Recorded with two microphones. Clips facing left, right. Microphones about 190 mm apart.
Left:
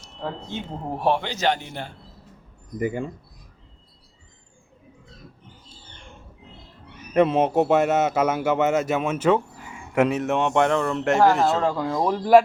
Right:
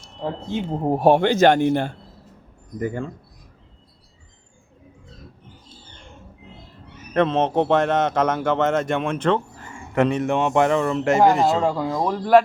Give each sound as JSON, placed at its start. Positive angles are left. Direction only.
{"t": 0.7, "sound": "speech", "side_deg": -35}
{"t": 2.7, "sound": "a man's voice", "side_deg": 10}
{"t": 7.1, "sound": "a man's voice", "side_deg": 10}
{"t": 11.9, "sound": "speech", "side_deg": 5}